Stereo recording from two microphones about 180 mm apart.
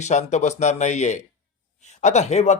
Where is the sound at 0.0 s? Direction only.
40° left (ahead or behind).